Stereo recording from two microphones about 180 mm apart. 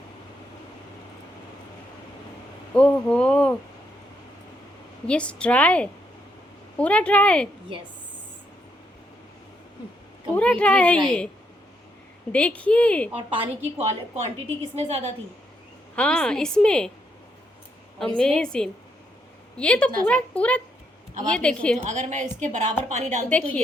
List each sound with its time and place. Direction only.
2.7 s a woman's voice: 5° left (ahead or behind)
5.0 s a woman's voice: 5° left (ahead or behind)
10.3 s a woman's voice: 5° left (ahead or behind)
12.3 s a woman's voice: 5° left (ahead or behind)
13.3 s a woman's voice: 30° right (ahead or behind)
16.0 s a woman's voice: 5° left (ahead or behind)
18.0 s a woman's voice: 5° left (ahead or behind)
21.8 s a woman's voice: 40° right (ahead or behind)
23.3 s a woman's voice: 5° left (ahead or behind)